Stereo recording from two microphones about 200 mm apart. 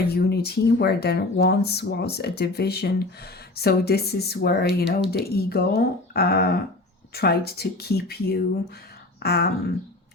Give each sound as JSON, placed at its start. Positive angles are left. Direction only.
{"t": 0.1, "sound": "speech", "side_deg": 55}